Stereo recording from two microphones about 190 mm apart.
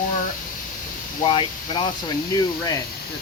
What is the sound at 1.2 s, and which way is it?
Speech, 25° left (ahead or behind).